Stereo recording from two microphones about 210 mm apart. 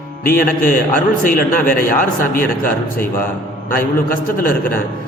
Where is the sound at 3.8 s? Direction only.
40° left (ahead or behind).